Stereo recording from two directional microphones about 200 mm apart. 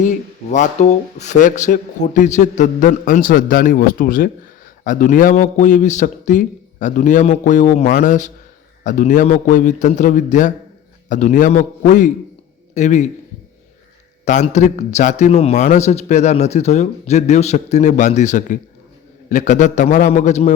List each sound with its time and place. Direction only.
0.0 s a man's voice: 40° left (ahead or behind)
14.3 s a man's voice: 35° left (ahead or behind)